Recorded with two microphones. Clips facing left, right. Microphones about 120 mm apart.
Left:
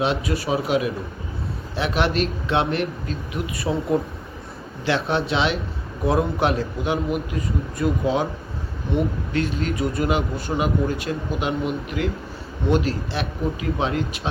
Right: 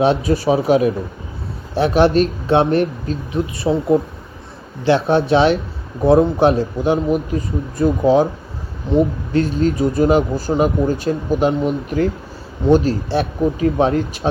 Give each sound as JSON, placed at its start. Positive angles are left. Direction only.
{"t": 0.1, "sound": "speech", "side_deg": -30}